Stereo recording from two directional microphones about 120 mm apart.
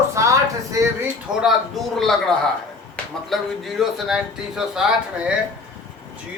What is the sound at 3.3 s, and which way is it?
A man's voice, centre (ahead or behind).